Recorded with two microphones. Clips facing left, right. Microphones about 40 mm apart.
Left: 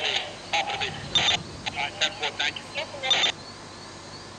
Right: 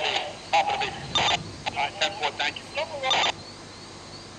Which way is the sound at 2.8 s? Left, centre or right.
Left.